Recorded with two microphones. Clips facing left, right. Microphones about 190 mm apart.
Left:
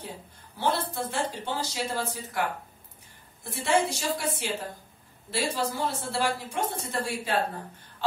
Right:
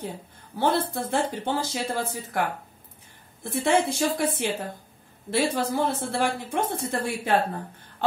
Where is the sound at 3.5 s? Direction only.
55° right (ahead or behind).